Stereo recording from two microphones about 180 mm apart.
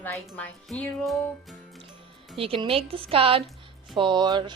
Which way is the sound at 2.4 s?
30° right (ahead or behind).